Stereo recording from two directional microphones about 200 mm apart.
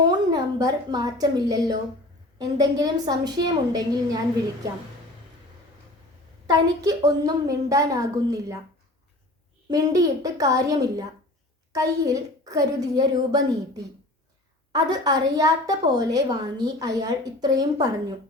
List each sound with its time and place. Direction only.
0.0 s a woman's voice: 20° right (ahead or behind)
6.5 s a woman's voice: 15° right (ahead or behind)
9.6 s a woman's voice: 20° right (ahead or behind)